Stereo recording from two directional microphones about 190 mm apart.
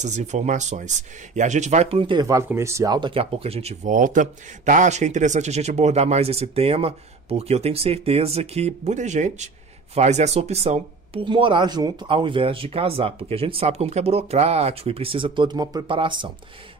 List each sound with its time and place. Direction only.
0.0 s speech: 40° right (ahead or behind)